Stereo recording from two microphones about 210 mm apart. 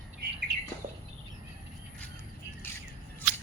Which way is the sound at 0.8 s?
40° right (ahead or behind).